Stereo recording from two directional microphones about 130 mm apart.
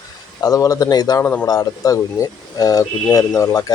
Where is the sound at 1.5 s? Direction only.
25° left (ahead or behind).